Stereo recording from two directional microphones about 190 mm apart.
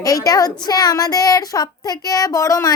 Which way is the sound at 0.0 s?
20° left (ahead or behind).